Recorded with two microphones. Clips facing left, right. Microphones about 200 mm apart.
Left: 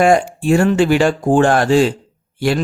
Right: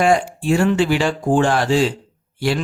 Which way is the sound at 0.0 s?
50° left (ahead or behind).